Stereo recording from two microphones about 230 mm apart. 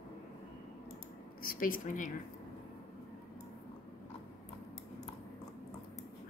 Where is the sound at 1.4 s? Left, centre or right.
Left.